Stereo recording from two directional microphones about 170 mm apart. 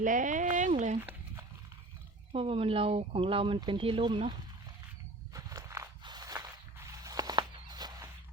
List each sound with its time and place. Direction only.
0.0 s speech: 50° right (ahead or behind)
2.3 s speech: 35° right (ahead or behind)
5.3 s walk: 20° right (ahead or behind)